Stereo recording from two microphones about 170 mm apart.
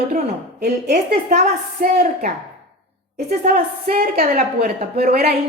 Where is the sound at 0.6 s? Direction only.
75° right (ahead or behind).